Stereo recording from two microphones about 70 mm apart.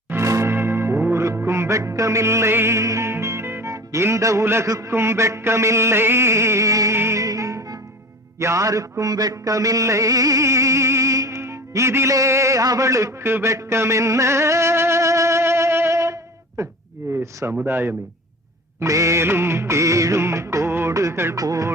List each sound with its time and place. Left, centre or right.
0.1 s church bell: right
0.5 s music: right
4.7 s music: right
6.9 s music: right
12.1 s a man's voice: right
16.6 s music: right
17.0 s a sound: right
17.7 s music: right
18.8 s music: right
21.3 s music: right